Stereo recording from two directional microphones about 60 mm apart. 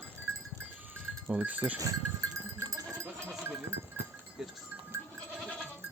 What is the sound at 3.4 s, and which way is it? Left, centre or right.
Goat, right.